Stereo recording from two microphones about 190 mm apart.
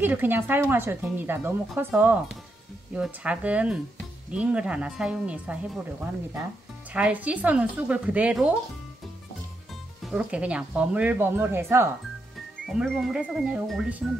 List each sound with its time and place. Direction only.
0.0 s speech: 10° right (ahead or behind)
10.0 s speech: 5° right (ahead or behind)
12.6 s speech: centre (ahead or behind)